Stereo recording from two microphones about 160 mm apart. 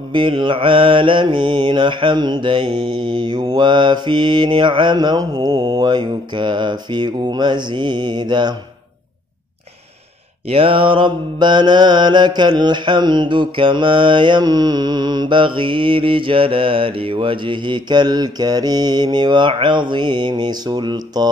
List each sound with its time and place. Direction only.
0.1 s mantra: 30° right (ahead or behind)
10.5 s mantra: 35° right (ahead or behind)